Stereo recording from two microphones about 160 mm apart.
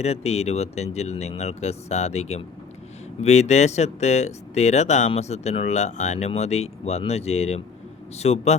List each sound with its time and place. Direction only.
0.0 s a man's voice: 40° left (ahead or behind)